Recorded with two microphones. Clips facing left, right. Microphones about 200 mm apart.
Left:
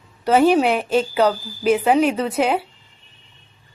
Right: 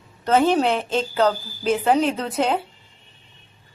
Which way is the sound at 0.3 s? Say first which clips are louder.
Left 3 dB; 10° left (ahead or behind).